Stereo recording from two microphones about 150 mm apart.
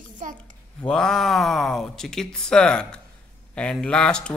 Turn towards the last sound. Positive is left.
turn(degrees=5)  # may be behind; listen again after turning